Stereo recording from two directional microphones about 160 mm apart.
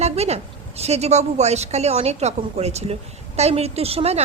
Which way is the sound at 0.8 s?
40° right (ahead or behind).